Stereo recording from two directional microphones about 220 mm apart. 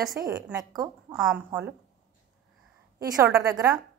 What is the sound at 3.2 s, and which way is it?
Speech, 10° right (ahead or behind).